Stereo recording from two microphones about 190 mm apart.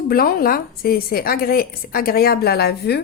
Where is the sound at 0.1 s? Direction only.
50° left (ahead or behind).